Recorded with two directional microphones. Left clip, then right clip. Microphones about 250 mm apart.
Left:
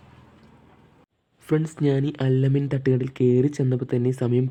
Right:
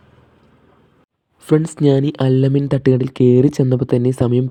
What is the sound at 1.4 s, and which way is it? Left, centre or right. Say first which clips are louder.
Speech: right 9 dB; centre.